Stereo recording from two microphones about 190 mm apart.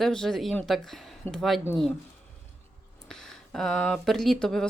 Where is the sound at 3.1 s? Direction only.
5° left (ahead or behind).